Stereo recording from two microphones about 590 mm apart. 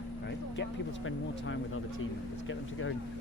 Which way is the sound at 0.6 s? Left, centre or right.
Centre.